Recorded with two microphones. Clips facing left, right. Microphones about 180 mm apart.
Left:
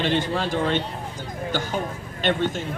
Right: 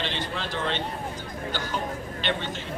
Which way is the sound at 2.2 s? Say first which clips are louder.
Left 8 dB; 50° left (ahead or behind).